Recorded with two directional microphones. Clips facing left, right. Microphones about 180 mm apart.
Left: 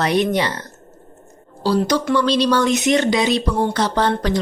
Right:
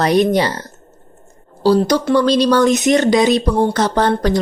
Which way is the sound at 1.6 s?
40° right (ahead or behind).